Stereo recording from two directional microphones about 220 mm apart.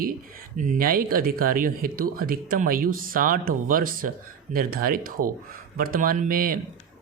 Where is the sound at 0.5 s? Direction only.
35° right (ahead or behind).